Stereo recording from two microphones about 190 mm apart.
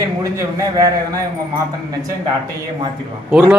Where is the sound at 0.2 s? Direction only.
15° right (ahead or behind).